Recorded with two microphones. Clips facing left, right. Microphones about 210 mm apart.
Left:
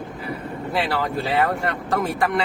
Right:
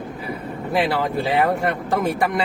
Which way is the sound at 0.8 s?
15° right (ahead or behind).